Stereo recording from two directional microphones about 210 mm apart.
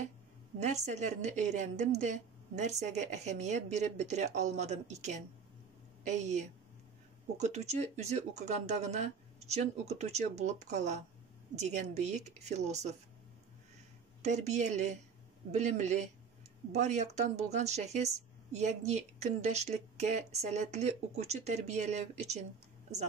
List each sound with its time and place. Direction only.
0.6 s speech: 35° right (ahead or behind)
14.2 s speech: 35° right (ahead or behind)